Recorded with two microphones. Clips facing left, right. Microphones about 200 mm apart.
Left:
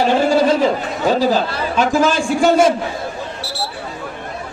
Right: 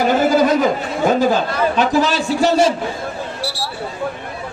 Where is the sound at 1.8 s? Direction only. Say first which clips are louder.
Left 4 dB; 45° left (ahead or behind).